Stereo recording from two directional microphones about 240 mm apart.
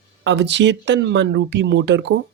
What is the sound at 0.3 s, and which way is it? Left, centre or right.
Speech, right.